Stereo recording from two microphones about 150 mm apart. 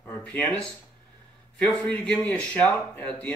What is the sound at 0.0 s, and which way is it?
Speech, 10° left (ahead or behind).